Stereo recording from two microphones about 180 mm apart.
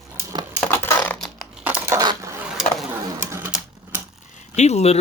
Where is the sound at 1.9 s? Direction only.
20° right (ahead or behind).